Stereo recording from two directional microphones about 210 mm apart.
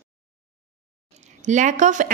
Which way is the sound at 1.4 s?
35° right (ahead or behind).